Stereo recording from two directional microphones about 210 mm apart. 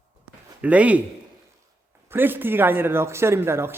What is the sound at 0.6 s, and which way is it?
Speech, 5° right (ahead or behind).